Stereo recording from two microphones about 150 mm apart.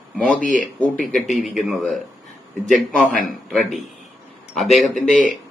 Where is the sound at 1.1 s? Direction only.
Centre (ahead or behind).